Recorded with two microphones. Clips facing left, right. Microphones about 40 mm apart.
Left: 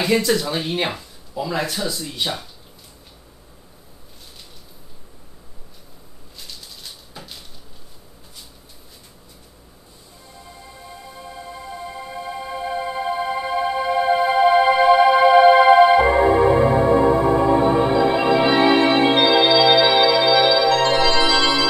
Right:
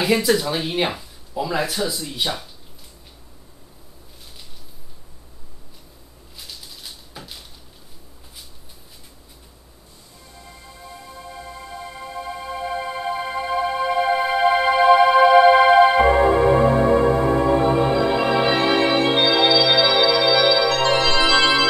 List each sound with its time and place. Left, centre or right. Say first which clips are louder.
0.0 s speech: even; centre
6.3 s a sound: even; centre
10.9 s music: even; centre
19.1 s organ: left 2 dB; centre
21.3 s music: right 1 dB; right